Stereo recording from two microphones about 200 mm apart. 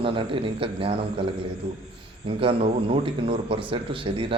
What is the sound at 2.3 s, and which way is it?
A man's voice, 30° right (ahead or behind).